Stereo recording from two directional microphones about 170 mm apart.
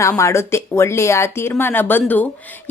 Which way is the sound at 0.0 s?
15° left (ahead or behind).